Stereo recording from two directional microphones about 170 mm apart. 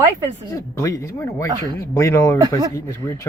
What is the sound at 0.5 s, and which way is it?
Speech, 20° left (ahead or behind).